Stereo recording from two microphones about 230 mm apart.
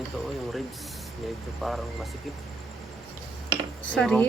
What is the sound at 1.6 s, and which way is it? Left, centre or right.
Speech, centre.